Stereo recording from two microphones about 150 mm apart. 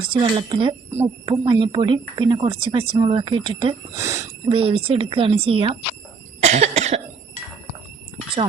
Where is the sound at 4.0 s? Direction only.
20° right (ahead or behind).